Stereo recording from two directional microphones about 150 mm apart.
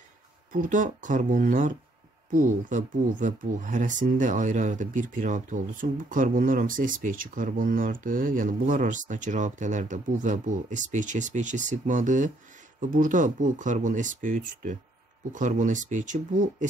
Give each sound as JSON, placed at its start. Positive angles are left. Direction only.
{"t": 0.5, "sound": "speech", "side_deg": -60}